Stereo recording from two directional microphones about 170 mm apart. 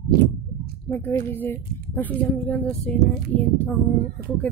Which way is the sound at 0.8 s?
15° left (ahead or behind).